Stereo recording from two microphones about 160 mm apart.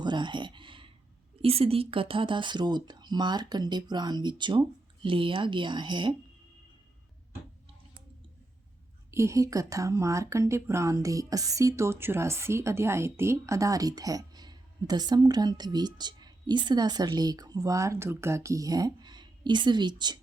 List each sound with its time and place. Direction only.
0.0 s a sound: 30° right (ahead or behind)
1.4 s speech: 35° right (ahead or behind)
9.1 s speech: 20° right (ahead or behind)